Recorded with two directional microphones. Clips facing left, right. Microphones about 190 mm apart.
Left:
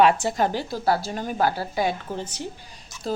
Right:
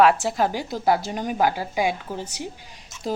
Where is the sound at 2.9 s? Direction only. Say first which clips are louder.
Even; 25° right (ahead or behind).